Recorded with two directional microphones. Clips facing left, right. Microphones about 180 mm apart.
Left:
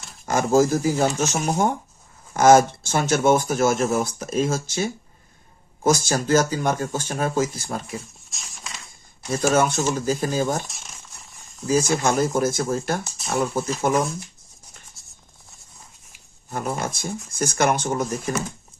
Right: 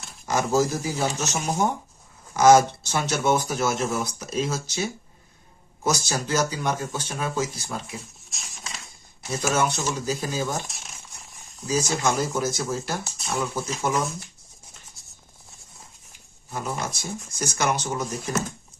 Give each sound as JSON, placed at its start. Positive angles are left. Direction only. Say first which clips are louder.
{"t": 0.3, "sound": "speech", "louder": "left 4 dB", "side_deg": 50}
{"t": 8.3, "sound": "a sound", "louder": "even", "side_deg": 0}
{"t": 9.5, "sound": "speech", "louder": "left 4 dB", "side_deg": 50}
{"t": 10.6, "sound": "a sound", "louder": "even", "side_deg": 0}
{"t": 11.7, "sound": "speech", "louder": "left 4 dB", "side_deg": 55}
{"t": 13.1, "sound": "speech", "louder": "left 2 dB", "side_deg": 0}
{"t": 13.3, "sound": "speech", "louder": "left 5 dB", "side_deg": 50}
{"t": 15.0, "sound": "maraca", "louder": "even", "side_deg": 0}
{"t": 16.5, "sound": "speech", "louder": "left 3 dB", "side_deg": 55}